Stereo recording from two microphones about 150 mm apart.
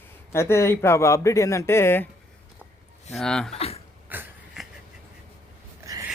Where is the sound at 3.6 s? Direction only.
40° left (ahead or behind).